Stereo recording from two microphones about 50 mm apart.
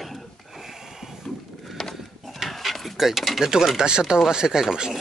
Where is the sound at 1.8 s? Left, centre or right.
Centre.